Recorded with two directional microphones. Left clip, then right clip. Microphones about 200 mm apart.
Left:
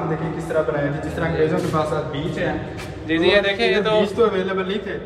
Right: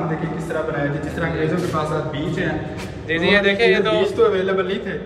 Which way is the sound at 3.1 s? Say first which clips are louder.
Even; 20° left (ahead or behind).